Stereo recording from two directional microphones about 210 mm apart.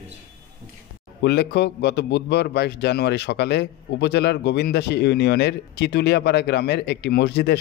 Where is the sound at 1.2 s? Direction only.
55° left (ahead or behind).